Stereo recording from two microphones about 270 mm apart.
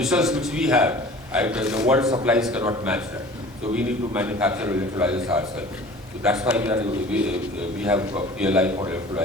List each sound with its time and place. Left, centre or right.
0.0 s a man's voice: centre